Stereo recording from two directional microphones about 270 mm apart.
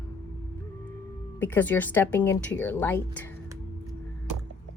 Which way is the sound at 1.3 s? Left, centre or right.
Centre.